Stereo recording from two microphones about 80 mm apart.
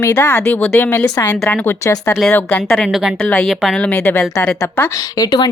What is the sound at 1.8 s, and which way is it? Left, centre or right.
Speech, left.